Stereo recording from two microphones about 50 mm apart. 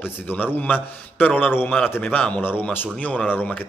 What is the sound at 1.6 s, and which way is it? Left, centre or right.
Speech, left.